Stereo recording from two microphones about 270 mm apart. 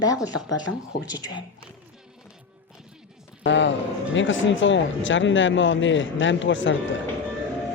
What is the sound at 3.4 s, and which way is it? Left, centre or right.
Speech, left.